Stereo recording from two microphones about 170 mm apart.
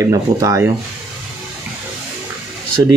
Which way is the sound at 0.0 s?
20° right (ahead or behind).